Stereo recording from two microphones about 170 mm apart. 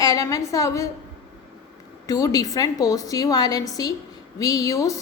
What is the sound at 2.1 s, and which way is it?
A woman's voice, 20° left (ahead or behind).